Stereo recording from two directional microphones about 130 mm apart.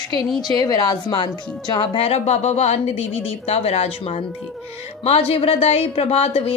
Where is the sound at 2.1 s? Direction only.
55° left (ahead or behind).